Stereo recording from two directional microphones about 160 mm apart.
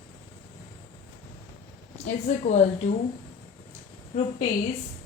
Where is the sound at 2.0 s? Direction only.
50° left (ahead or behind).